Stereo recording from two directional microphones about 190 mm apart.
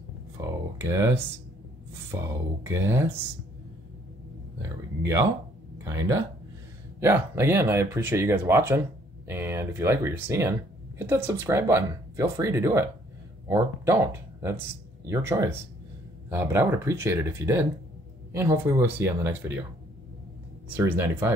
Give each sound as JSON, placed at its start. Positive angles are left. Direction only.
{"t": 0.4, "sound": "a sound", "side_deg": -15}
{"t": 2.1, "sound": "speech", "side_deg": -10}
{"t": 4.6, "sound": "speech", "side_deg": -15}
{"t": 20.7, "sound": "speech", "side_deg": -10}